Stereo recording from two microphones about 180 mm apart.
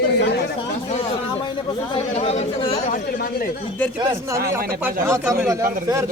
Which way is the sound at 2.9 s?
55° left (ahead or behind).